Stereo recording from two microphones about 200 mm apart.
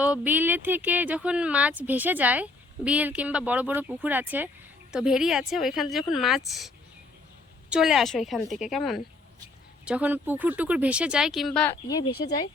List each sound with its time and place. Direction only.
0.0 s speech: 10° right (ahead or behind)
7.7 s speech: centre (ahead or behind)
11.9 s speech: 20° left (ahead or behind)